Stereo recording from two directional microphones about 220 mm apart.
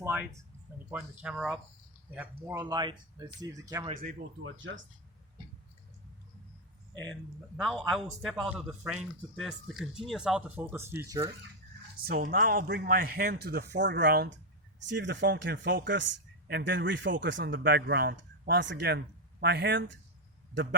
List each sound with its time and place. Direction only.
0.0 s a sound: 10° right (ahead or behind)
0.9 s a man's voice: 5° right (ahead or behind)
4.4 s speech: 60° right (ahead or behind)
6.9 s a man's voice: 10° left (ahead or behind); by 11.3 s 15° right (ahead or behind)
12.0 s a man's voice: 40° right (ahead or behind)